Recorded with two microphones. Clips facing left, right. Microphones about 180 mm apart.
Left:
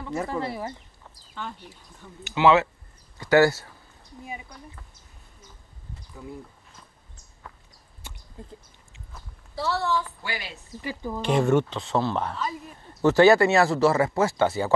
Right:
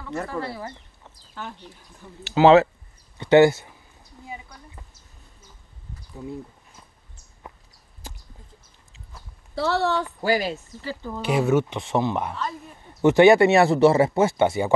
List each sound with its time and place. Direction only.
0.3 s speech: 20° left (ahead or behind)
1.4 s speech: 5° right (ahead or behind)
2.3 s speech: 40° right (ahead or behind)
3.2 s speech: 25° right (ahead or behind)
9.6 s speech: 75° right (ahead or behind)
10.2 s speech: 40° right (ahead or behind)
10.8 s speech: 15° left (ahead or behind)
11.1 s speech: 5° right (ahead or behind)
11.7 s speech: 20° right (ahead or behind)